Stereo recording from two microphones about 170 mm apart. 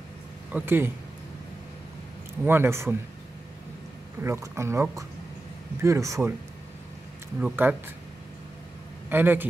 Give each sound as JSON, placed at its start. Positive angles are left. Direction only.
{"t": 0.5, "sound": "speech", "side_deg": -10}
{"t": 2.4, "sound": "speech", "side_deg": -15}
{"t": 4.2, "sound": "speech", "side_deg": -15}
{"t": 7.3, "sound": "speech", "side_deg": -10}
{"t": 9.1, "sound": "speech", "side_deg": -10}